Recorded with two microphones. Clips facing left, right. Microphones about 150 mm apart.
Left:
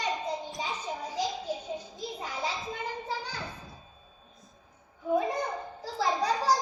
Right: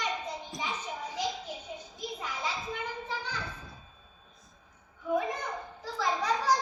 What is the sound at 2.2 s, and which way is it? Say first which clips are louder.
Children playing: left 2 dB; 35° left (ahead or behind).